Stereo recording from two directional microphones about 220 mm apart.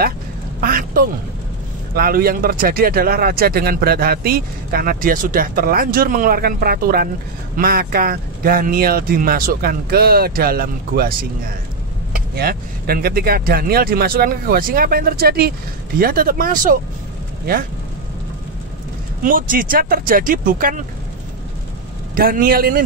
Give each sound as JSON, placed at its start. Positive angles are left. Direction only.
{"t": 0.6, "sound": "speech", "side_deg": -40}
{"t": 19.2, "sound": "speech", "side_deg": -40}
{"t": 22.1, "sound": "speech", "side_deg": -40}